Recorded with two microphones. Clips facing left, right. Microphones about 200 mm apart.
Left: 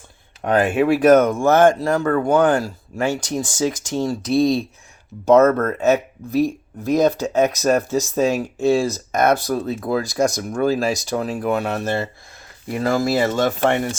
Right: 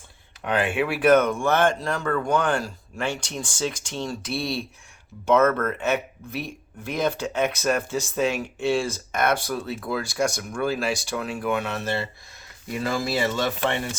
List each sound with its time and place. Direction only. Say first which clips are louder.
0.4 s speech: left 7 dB; 40° left (ahead or behind)